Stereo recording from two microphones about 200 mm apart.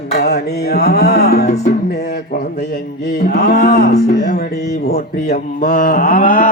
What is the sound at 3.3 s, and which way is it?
Music, 55° left (ahead or behind).